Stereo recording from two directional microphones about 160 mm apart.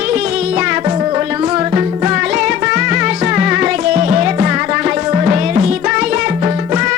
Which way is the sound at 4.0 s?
40° right (ahead or behind).